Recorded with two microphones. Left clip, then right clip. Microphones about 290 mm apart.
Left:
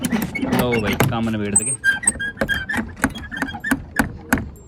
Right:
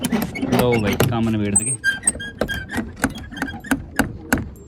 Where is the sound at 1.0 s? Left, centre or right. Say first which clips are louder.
Even; centre.